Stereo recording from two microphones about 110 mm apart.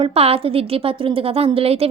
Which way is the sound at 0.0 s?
65° right (ahead or behind).